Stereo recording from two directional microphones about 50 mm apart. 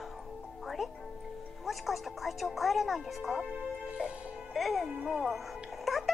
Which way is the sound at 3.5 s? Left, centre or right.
Right.